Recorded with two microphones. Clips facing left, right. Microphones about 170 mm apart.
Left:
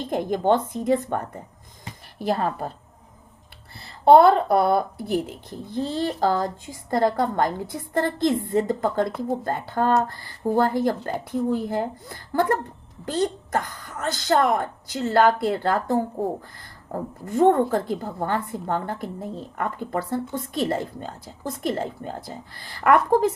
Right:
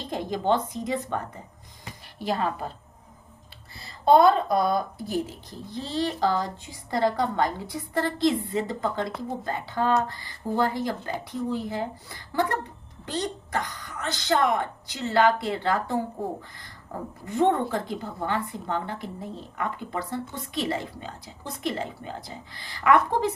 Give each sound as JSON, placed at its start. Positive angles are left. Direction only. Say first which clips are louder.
{"t": 0.0, "sound": "a woman's voice", "louder": "left 5 dB", "side_deg": 50}
{"t": 2.2, "sound": "a woman's voice", "louder": "left 3 dB", "side_deg": 45}
{"t": 4.0, "sound": "a woman's voice", "louder": "left 4 dB", "side_deg": 65}